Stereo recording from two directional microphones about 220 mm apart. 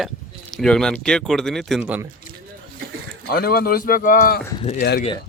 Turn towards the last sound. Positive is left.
turn(degrees=45)  # may be behind; listen again after turning